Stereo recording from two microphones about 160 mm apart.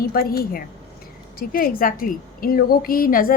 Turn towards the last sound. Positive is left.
turn(degrees=65)  # may be behind; listen again after turning